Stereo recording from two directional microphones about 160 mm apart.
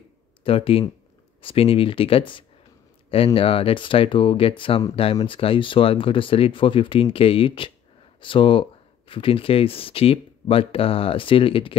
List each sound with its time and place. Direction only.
0.4 s speech: 35° left (ahead or behind)